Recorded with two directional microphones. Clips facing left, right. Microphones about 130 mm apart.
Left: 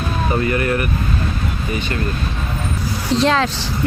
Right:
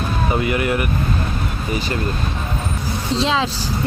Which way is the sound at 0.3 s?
15° right (ahead or behind).